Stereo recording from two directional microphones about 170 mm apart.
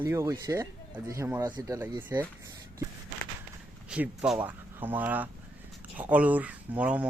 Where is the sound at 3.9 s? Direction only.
5° right (ahead or behind).